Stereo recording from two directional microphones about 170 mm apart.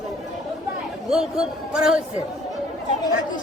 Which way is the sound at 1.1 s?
5° right (ahead or behind).